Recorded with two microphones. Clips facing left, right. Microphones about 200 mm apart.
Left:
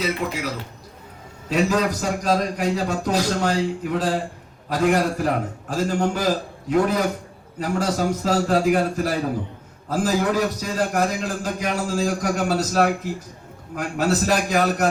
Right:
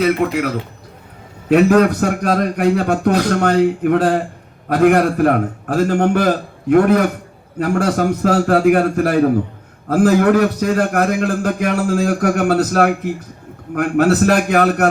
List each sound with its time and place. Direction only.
0.0 s a man's voice: 60° right (ahead or behind)